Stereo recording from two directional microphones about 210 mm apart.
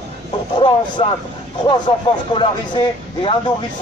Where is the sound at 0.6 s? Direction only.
20° left (ahead or behind).